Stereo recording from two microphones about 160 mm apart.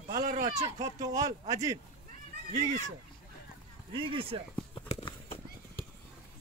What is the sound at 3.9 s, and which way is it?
Speech, 35° right (ahead or behind).